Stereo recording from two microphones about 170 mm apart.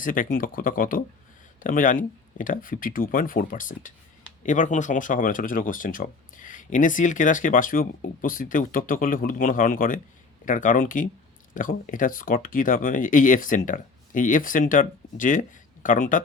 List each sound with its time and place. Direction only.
0.0 s speech: 50° left (ahead or behind)